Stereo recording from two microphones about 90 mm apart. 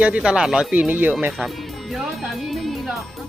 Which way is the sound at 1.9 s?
Centre (ahead or behind).